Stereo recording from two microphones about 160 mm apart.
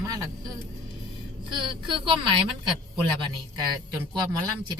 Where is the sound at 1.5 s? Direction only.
30° right (ahead or behind).